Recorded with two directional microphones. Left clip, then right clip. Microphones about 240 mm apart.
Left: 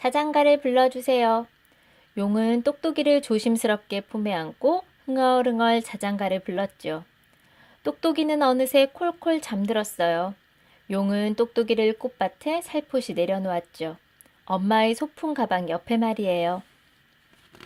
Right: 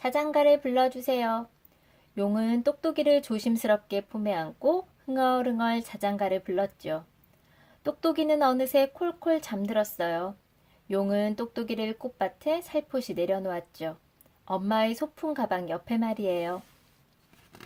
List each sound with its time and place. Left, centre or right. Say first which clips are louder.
0.0 s speech: left 3 dB; left